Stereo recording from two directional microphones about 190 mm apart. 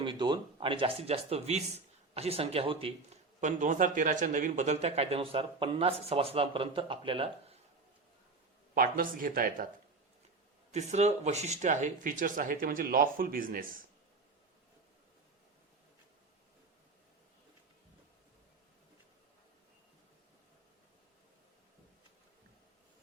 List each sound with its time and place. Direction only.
0.0 s speech: 25° right (ahead or behind)
3.4 s speech: 40° right (ahead or behind)
8.7 s speech: 50° right (ahead or behind)
10.7 s speech: 35° right (ahead or behind)